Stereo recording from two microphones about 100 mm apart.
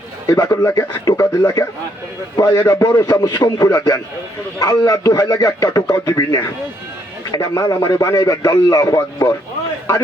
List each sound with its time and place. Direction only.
0.3 s a man's voice: 35° left (ahead or behind)
2.6 s a man's voice: 30° left (ahead or behind)